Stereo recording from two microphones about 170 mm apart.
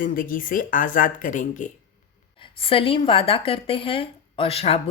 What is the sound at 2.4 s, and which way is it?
Speech, 30° left (ahead or behind).